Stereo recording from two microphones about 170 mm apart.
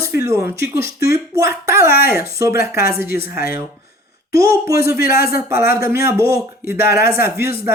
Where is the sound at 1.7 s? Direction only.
15° right (ahead or behind).